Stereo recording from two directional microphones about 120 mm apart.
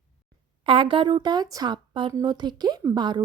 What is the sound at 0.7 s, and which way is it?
A woman's voice, 45° right (ahead or behind).